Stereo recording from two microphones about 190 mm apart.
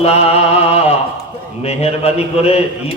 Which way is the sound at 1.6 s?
35° left (ahead or behind).